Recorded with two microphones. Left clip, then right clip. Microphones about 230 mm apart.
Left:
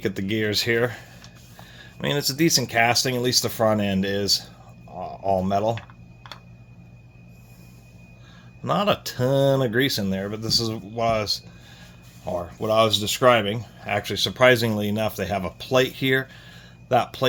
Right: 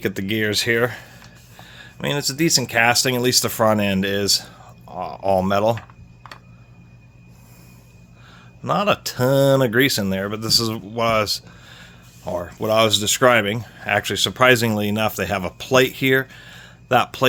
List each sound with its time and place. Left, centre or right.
0.0 s speech: right
8.6 s speech: centre; by 17.2 s right